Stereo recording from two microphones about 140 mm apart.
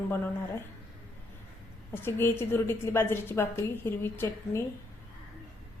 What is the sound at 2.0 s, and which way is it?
A woman's voice, 15° left (ahead or behind).